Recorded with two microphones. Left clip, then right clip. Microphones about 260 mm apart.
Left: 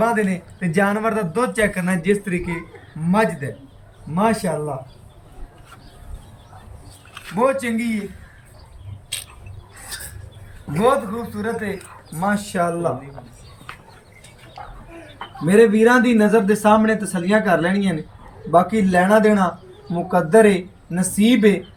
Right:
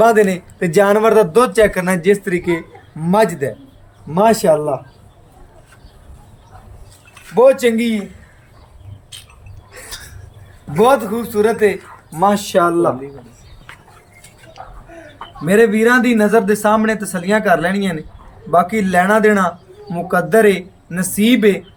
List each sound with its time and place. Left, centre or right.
0.0 s speech: right
7.3 s speech: right
10.8 s a man's voice: right
15.7 s speech: centre